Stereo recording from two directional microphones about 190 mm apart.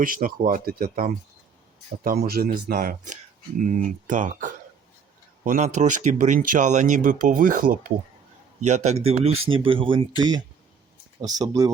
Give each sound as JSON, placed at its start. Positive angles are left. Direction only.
{"t": 0.0, "sound": "speech", "side_deg": -45}
{"t": 8.6, "sound": "speech", "side_deg": -35}